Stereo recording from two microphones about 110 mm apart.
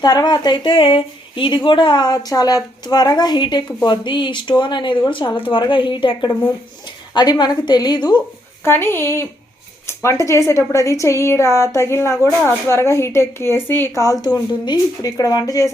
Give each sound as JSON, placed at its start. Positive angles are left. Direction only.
{"t": 0.0, "sound": "speech", "side_deg": 40}
{"t": 8.6, "sound": "a woman's voice", "side_deg": 20}
{"t": 14.0, "sound": "speech", "side_deg": 35}